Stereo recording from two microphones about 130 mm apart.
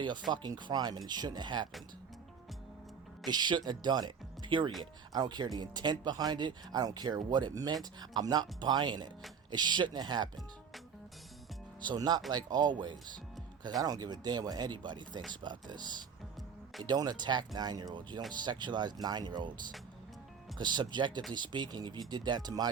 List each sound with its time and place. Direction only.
0.3 s speech: 35° right (ahead or behind)
3.2 s speech: 35° right (ahead or behind)
11.9 s speech: 30° right (ahead or behind)
20.6 s speech: 35° right (ahead or behind)